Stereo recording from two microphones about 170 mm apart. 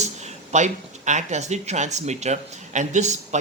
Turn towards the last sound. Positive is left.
turn(degrees=-45)  # may be behind; listen again after turning